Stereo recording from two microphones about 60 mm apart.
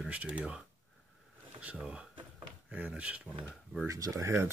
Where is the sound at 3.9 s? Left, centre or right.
Right.